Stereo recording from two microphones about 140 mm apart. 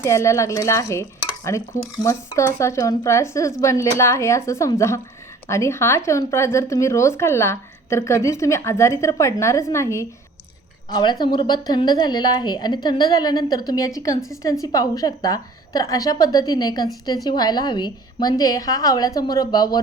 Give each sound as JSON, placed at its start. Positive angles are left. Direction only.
{"t": 0.0, "sound": "a woman's voice", "side_deg": 20}
{"t": 10.9, "sound": "a woman's voice", "side_deg": 30}